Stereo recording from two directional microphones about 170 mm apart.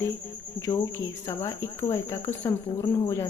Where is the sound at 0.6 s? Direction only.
20° left (ahead or behind).